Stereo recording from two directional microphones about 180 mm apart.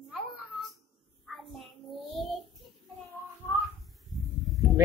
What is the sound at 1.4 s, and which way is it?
Child singing, centre (ahead or behind).